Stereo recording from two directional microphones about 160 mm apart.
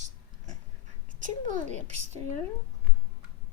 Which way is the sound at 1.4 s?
50° right (ahead or behind).